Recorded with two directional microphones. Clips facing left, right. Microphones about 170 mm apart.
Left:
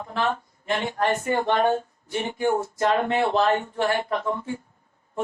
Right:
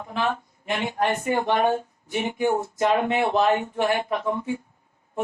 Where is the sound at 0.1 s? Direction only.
15° right (ahead or behind).